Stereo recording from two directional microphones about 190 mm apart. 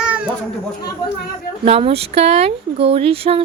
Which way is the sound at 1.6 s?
30° right (ahead or behind).